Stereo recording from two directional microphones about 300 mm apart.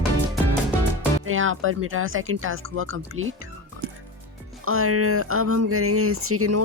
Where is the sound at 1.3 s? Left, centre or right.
Right.